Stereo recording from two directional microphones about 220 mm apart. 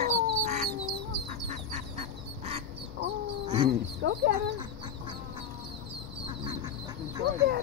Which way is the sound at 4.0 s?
45° right (ahead or behind).